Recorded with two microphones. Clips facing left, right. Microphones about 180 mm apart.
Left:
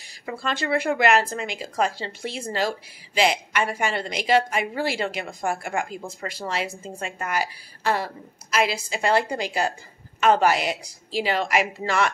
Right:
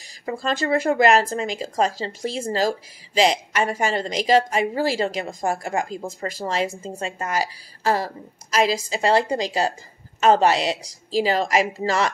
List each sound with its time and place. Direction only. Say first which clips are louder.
0.2 s a woman's voice: right 4 dB; 35° right (ahead or behind)
6.8 s a woman's voice: right 3 dB; 30° right (ahead or behind)